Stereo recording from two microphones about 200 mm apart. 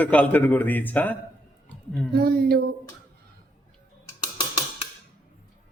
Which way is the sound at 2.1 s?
50° right (ahead or behind).